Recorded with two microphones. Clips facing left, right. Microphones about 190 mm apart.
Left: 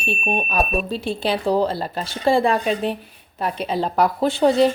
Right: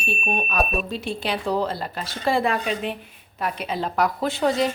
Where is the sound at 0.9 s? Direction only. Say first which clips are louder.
Left 4 dB; 30° left (ahead or behind).